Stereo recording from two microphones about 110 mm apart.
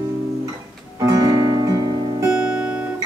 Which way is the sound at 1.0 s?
35° right (ahead or behind).